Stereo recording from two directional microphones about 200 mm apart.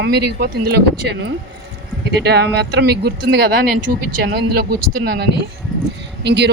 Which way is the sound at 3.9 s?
45° right (ahead or behind).